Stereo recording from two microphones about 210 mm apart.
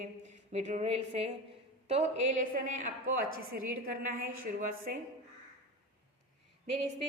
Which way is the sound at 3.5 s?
45° right (ahead or behind).